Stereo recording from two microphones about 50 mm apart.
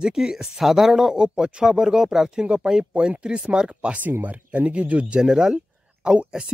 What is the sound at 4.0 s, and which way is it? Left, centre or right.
Speech, right.